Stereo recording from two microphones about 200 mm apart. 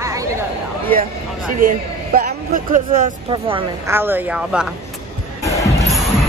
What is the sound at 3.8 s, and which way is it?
Speech, 10° right (ahead or behind).